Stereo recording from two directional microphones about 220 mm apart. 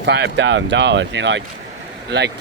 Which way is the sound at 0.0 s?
50° right (ahead or behind).